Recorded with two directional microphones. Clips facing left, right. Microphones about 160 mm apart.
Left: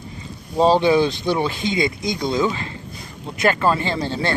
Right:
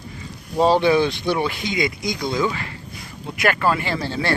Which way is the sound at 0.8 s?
20° left (ahead or behind).